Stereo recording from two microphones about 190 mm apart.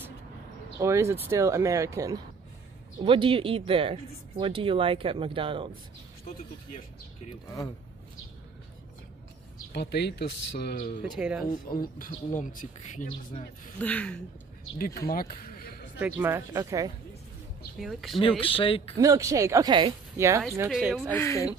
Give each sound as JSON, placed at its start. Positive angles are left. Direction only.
{"t": 0.7, "sound": "speech", "side_deg": -15}
{"t": 3.0, "sound": "speech", "side_deg": -25}
{"t": 9.7, "sound": "speech", "side_deg": 60}
{"t": 11.0, "sound": "speech", "side_deg": -5}
{"t": 11.7, "sound": "speech", "side_deg": 50}
{"t": 13.3, "sound": "speech", "side_deg": 35}
{"t": 13.7, "sound": "speech", "side_deg": 5}
{"t": 15.0, "sound": "a sound", "side_deg": 50}
{"t": 16.0, "sound": "speech", "side_deg": -10}
{"t": 17.7, "sound": "speech", "side_deg": 0}
{"t": 18.4, "sound": "speech", "side_deg": 30}
{"t": 18.9, "sound": "speech", "side_deg": -15}
{"t": 20.7, "sound": "speech", "side_deg": -5}
{"t": 21.2, "sound": "speech", "side_deg": 15}